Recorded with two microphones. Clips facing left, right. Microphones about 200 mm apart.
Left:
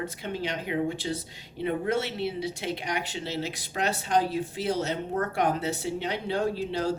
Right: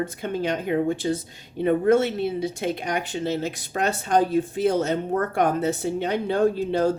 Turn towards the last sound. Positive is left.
turn(degrees=-50)  # may be behind; listen again after turning